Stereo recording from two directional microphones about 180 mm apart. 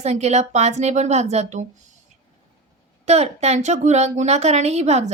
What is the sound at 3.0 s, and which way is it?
A woman's voice, 35° right (ahead or behind).